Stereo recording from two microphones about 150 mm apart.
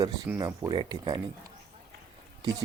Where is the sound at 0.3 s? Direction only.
25° right (ahead or behind).